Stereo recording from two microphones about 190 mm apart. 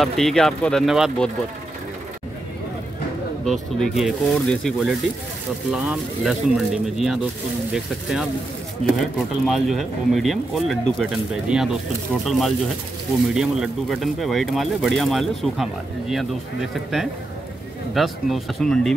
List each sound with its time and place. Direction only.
0.0 s speech: centre (ahead or behind)
3.8 s speech: centre (ahead or behind)
8.8 s speech: 35° right (ahead or behind)
9.5 s speech: centre (ahead or behind)